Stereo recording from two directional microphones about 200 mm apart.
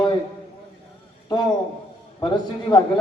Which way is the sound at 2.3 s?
20° left (ahead or behind).